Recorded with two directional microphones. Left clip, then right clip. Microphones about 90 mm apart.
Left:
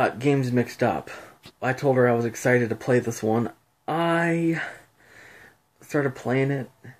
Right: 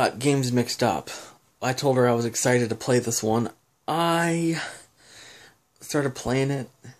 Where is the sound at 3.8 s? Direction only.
25° right (ahead or behind).